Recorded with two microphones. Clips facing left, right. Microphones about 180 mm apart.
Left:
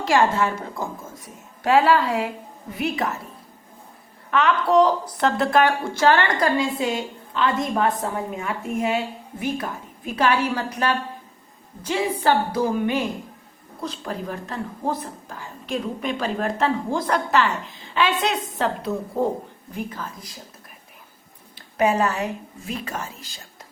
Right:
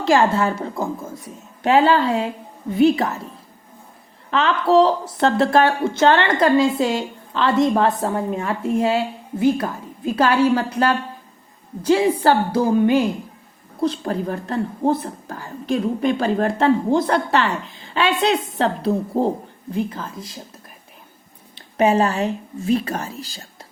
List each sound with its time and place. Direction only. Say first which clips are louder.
0.0 s a woman's voice: right 3 dB; 30° right (ahead or behind)
4.3 s speech: right 2 dB; 30° right (ahead or behind)
10.1 s a woman's voice: right 5 dB; 30° right (ahead or behind)
21.5 s speech: right 4 dB; 25° right (ahead or behind)